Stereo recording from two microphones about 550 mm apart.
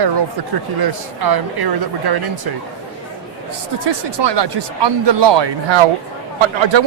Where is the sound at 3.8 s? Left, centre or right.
Right.